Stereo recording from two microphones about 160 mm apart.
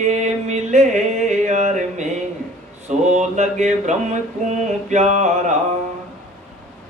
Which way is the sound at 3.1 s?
45° right (ahead or behind).